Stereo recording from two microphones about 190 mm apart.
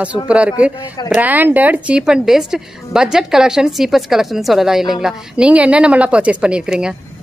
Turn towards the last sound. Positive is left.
turn(degrees=-5)  # may be behind; listen again after turning